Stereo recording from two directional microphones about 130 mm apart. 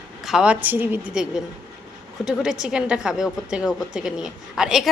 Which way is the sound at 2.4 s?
5° right (ahead or behind).